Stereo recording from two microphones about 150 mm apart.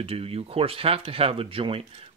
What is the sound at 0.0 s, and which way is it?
Speech, 40° right (ahead or behind).